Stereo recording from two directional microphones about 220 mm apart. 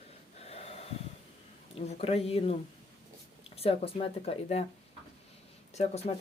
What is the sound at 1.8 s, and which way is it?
Speech, 30° left (ahead or behind).